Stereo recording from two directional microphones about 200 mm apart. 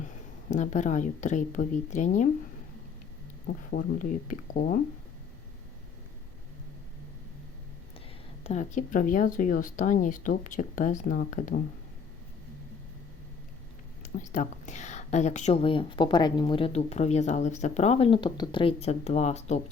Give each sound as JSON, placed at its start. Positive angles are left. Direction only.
{"t": 0.5, "sound": "a woman's voice", "side_deg": 35}
{"t": 3.7, "sound": "a woman's voice", "side_deg": 40}
{"t": 8.4, "sound": "a woman's voice", "side_deg": 35}
{"t": 14.0, "sound": "a woman's voice", "side_deg": 40}